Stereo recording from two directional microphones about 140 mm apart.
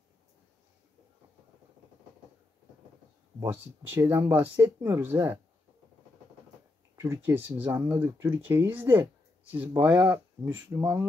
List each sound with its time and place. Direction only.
3.3 s speech: 15° right (ahead or behind)
7.0 s speech: 20° right (ahead or behind)